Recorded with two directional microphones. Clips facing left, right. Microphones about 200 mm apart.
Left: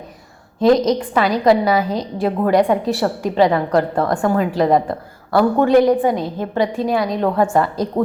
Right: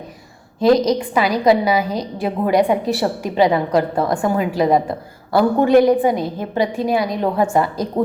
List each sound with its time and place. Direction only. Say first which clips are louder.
0.9 s a woman's voice: even; 10° right (ahead or behind)